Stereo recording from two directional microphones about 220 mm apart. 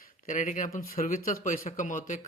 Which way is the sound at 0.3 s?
35° left (ahead or behind).